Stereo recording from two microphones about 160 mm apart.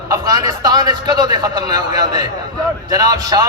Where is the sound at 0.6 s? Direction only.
25° right (ahead or behind).